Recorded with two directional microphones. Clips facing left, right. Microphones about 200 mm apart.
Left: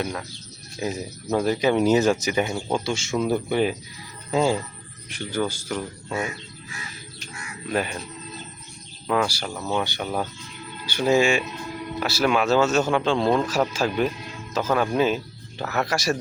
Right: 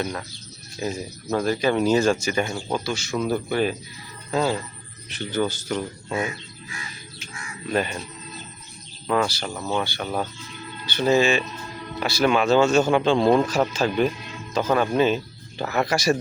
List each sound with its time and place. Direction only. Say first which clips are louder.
0.0 s speech: even; 5° left (ahead or behind)
7.7 s speech: right 1 dB; 5° left (ahead or behind)
9.0 s speech: right 1 dB; 5° left (ahead or behind)
9.8 s speech: even; 15° left (ahead or behind)
11.9 s speech: right 1 dB; 5° left (ahead or behind)
13.5 s speech: right 1 dB; 5° left (ahead or behind)